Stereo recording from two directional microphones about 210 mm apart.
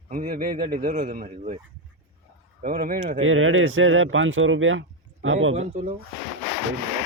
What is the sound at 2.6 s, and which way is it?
Speech, 45° right (ahead or behind).